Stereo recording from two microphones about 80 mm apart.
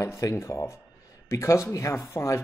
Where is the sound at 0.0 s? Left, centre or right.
Left.